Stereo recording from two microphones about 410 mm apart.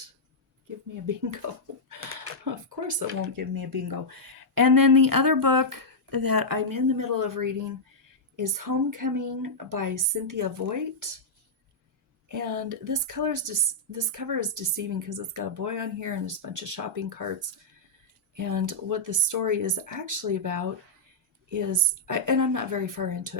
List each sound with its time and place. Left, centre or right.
1.0 s a woman's voice: right
2.1 s a sound: right
3.3 s a woman's voice: right
12.3 s a woman's voice: right
18.3 s a woman's voice: right